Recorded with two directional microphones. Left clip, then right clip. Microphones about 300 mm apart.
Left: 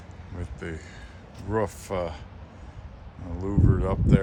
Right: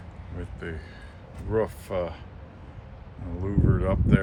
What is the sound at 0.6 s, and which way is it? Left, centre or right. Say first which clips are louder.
A man's voice: left 1 dB; left.